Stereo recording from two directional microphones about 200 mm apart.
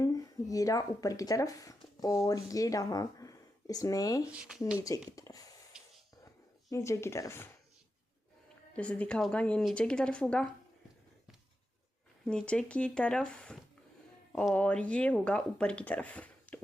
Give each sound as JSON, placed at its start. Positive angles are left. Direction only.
{"t": 0.0, "sound": "speech", "side_deg": 15}
{"t": 4.3, "sound": "speech", "side_deg": -5}
{"t": 4.8, "sound": "speech", "side_deg": 15}
{"t": 5.7, "sound": "a sound", "side_deg": -5}
{"t": 6.7, "sound": "speech", "side_deg": 15}
{"t": 8.7, "sound": "speech", "side_deg": 5}
{"t": 12.2, "sound": "speech", "side_deg": 5}